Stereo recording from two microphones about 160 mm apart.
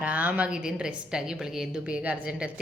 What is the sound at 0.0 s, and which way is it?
A woman's voice, 10° right (ahead or behind).